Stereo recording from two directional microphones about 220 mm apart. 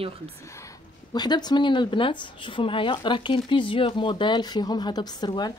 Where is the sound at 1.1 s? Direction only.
20° left (ahead or behind).